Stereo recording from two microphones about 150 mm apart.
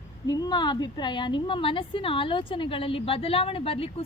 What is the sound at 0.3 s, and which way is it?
A woman's voice, 25° left (ahead or behind).